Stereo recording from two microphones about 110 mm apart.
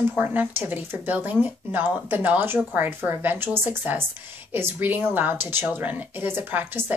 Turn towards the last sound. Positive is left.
turn(degrees=-20)  # may be behind; listen again after turning